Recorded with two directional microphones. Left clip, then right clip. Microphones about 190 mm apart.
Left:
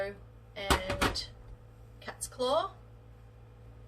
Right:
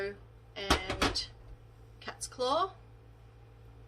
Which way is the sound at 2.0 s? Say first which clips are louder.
Left 1 dB; 40° right (ahead or behind).